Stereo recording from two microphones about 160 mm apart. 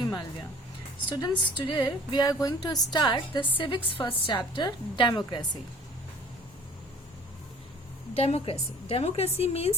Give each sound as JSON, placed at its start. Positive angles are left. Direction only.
{"t": 1.2, "sound": "speech", "side_deg": 25}
{"t": 8.1, "sound": "a woman's voice", "side_deg": 40}